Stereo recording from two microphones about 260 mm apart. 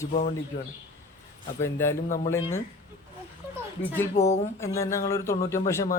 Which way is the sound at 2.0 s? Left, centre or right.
Left.